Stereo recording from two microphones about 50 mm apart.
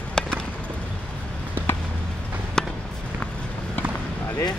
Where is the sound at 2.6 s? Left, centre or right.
Centre.